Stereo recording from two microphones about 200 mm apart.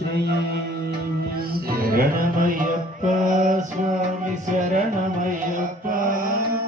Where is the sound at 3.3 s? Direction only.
40° right (ahead or behind).